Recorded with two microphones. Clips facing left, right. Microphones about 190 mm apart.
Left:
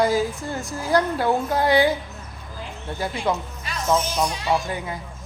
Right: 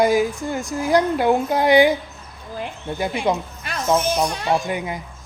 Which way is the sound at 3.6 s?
60° right (ahead or behind).